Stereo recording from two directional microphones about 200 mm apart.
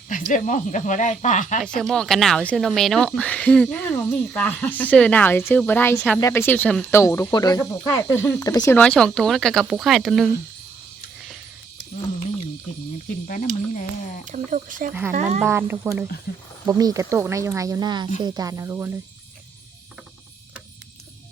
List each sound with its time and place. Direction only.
0.1 s speech: 40° left (ahead or behind)
1.6 s speech: 5° left (ahead or behind)
13.2 s speech: 40° left (ahead or behind)
14.3 s speech: 40° right (ahead or behind)
15.4 s speech: 10° right (ahead or behind)